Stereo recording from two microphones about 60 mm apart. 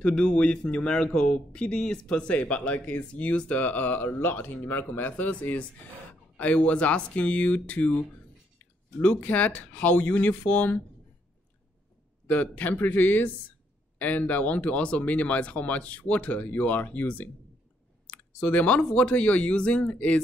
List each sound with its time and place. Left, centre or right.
0.0 s speech: centre
12.3 s a man's voice: left